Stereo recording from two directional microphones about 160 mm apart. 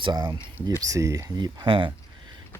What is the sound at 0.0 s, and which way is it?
Speech, 30° right (ahead or behind).